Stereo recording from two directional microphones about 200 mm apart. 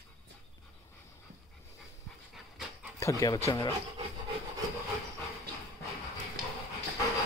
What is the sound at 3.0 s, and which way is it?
Speech, 15° left (ahead or behind).